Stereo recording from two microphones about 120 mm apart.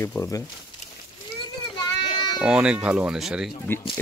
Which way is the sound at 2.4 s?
5° right (ahead or behind).